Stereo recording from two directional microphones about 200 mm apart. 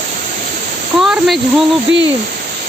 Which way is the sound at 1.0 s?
Centre (ahead or behind).